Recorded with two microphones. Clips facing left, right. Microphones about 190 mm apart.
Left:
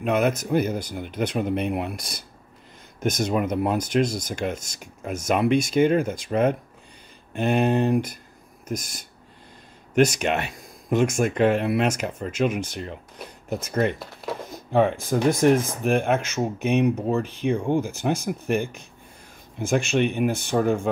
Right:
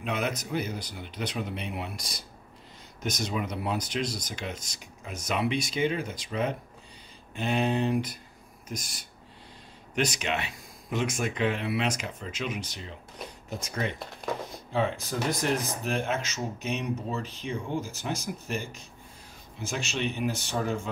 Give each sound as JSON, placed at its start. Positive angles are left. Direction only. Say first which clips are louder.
{"t": 0.0, "sound": "speech", "louder": "left 9 dB", "side_deg": 50}